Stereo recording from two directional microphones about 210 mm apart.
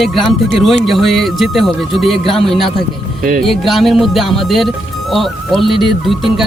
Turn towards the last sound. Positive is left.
turn(degrees=0)  # may be behind; listen again after turning